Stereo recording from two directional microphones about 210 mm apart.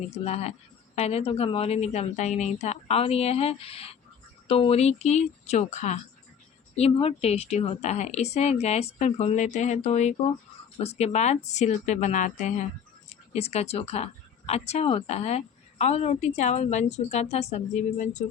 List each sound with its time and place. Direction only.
0.1 s a woman's voice: 30° left (ahead or behind)